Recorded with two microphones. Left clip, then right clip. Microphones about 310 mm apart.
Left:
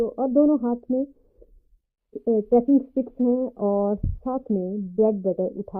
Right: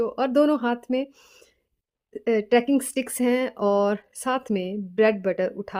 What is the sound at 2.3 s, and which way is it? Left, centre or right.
Speech, right.